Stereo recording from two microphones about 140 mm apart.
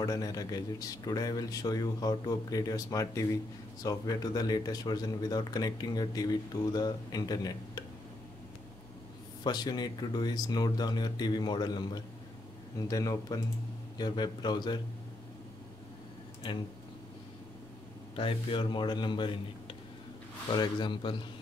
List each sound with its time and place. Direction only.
0.0 s speech: 25° left (ahead or behind)
9.4 s speech: 30° left (ahead or behind)
18.1 s speech: 40° left (ahead or behind)